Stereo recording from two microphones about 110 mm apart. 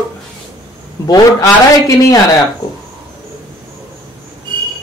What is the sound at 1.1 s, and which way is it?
A man's voice, 30° left (ahead or behind).